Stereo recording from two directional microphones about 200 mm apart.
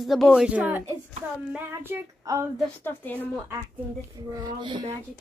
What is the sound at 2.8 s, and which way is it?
Speech, 10° left (ahead or behind).